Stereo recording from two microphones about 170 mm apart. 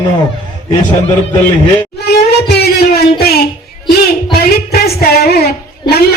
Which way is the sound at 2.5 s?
70° left (ahead or behind).